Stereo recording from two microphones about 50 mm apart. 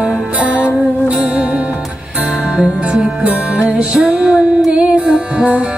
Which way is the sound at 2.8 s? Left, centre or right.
Right.